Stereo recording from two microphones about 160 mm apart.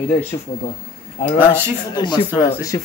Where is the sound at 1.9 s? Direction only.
30° left (ahead or behind).